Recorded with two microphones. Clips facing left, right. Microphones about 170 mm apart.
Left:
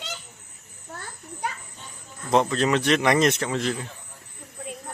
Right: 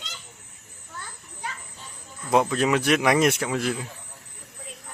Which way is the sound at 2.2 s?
10° right (ahead or behind).